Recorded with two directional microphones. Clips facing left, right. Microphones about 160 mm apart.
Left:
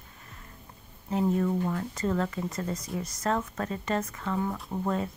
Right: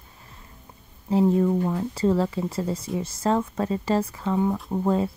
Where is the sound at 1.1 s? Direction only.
30° right (ahead or behind).